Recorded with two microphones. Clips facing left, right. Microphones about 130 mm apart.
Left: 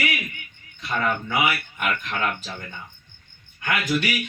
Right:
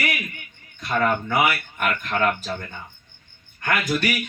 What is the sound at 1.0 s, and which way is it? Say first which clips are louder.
Speech: right 3 dB; 45° right (ahead or behind).